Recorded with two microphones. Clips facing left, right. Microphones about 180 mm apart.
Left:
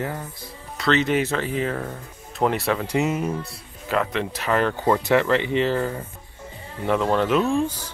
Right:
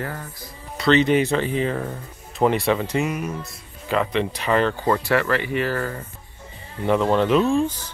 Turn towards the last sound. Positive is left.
turn(degrees=5)  # may be behind; listen again after turning